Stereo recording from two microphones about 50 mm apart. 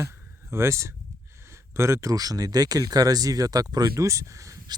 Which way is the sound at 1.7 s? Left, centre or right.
Right.